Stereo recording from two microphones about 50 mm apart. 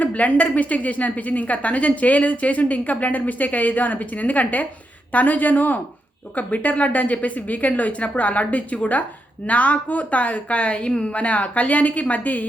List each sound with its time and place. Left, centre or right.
0.0 s a woman's voice: left